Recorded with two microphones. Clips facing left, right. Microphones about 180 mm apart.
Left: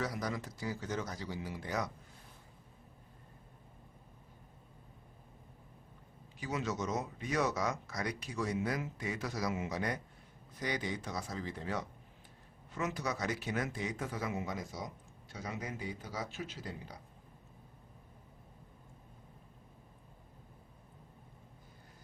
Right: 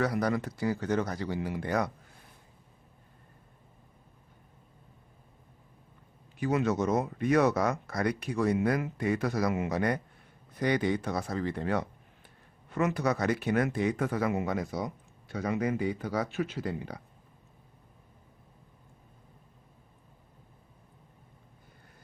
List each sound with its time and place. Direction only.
0.0 s speech: 65° right (ahead or behind)
6.4 s speech: 60° right (ahead or behind)